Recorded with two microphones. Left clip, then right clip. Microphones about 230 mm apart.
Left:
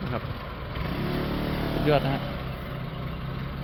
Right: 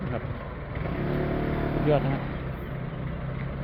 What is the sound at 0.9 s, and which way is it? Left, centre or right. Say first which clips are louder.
Vehicle: right 2 dB; left.